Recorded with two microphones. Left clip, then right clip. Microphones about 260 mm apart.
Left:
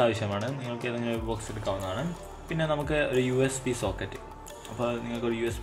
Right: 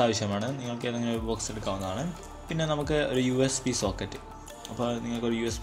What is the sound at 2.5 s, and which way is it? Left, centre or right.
Speech, right.